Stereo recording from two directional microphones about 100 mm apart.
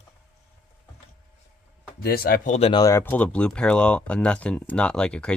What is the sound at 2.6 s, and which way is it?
Speech, 70° left (ahead or behind).